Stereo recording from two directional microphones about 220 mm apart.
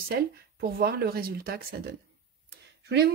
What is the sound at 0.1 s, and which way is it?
Speech, 45° right (ahead or behind).